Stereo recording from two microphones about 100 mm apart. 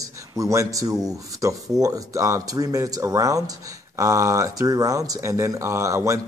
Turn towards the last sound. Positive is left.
turn(degrees=-30)  # may be behind; listen again after turning